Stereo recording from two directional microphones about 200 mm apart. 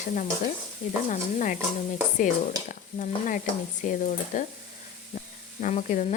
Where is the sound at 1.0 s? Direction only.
40° left (ahead or behind).